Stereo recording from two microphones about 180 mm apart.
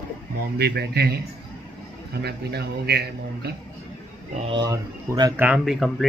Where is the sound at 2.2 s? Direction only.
65° right (ahead or behind).